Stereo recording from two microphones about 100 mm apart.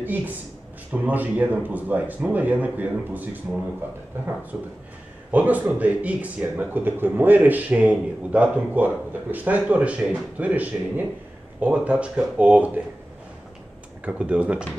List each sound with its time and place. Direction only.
0.0 s a sound: 15° right (ahead or behind)
0.9 s a man's voice: 15° right (ahead or behind)
5.3 s a man's voice: 15° right (ahead or behind)
14.0 s a man's voice: 10° right (ahead or behind)